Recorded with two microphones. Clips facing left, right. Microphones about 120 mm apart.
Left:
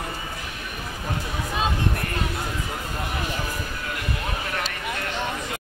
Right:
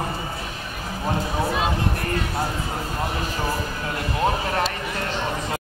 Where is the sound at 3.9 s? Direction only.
30° right (ahead or behind).